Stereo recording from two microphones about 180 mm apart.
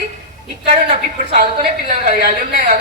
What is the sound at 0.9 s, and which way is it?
A woman's voice, 40° right (ahead or behind).